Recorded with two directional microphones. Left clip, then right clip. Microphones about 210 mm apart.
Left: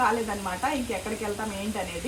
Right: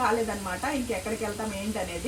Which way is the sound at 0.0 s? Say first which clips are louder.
Left 1 dB; centre (ahead or behind).